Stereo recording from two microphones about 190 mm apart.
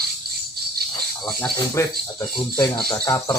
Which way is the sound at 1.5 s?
15° left (ahead or behind).